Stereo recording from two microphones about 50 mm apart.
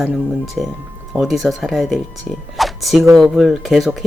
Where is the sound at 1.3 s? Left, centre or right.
Centre.